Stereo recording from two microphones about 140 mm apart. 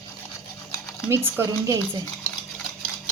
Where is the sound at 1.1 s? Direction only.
15° right (ahead or behind).